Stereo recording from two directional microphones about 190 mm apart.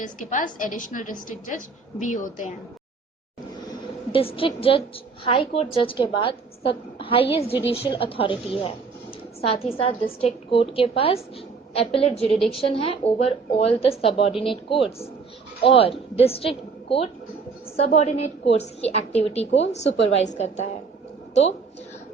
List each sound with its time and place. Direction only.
0.0 s a woman's voice: 45° left (ahead or behind)
3.6 s a sound: 25° left (ahead or behind)
5.2 s a woman's voice: 30° left (ahead or behind)